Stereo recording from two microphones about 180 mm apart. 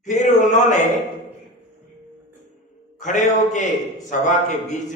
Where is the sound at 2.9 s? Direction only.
40° left (ahead or behind).